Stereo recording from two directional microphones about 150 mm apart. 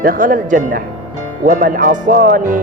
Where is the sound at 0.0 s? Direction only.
70° right (ahead or behind).